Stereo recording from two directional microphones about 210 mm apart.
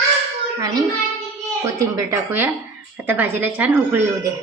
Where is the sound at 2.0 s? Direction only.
10° right (ahead or behind).